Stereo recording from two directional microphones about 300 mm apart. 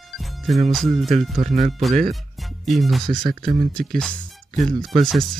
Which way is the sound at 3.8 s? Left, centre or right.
Centre.